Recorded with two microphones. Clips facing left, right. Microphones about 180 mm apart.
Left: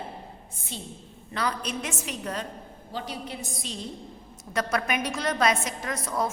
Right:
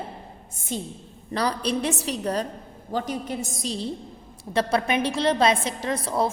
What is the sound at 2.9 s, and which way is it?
A woman's voice, 45° right (ahead or behind).